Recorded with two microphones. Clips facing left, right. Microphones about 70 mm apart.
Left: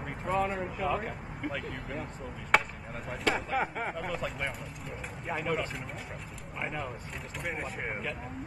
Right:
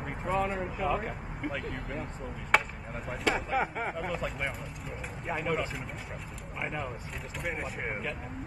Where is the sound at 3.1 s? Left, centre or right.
Centre.